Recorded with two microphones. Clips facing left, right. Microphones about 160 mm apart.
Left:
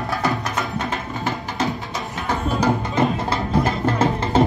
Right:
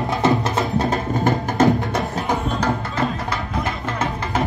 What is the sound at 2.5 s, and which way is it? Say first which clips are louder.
Music: left 2 dB; 15° left (ahead or behind).